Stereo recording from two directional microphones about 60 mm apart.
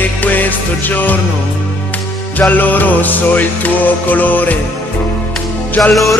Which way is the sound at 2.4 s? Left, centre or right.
Left.